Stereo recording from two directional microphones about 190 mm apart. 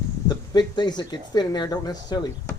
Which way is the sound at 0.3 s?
20° left (ahead or behind).